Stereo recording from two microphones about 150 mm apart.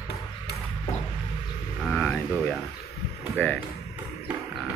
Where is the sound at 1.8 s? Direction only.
10° left (ahead or behind).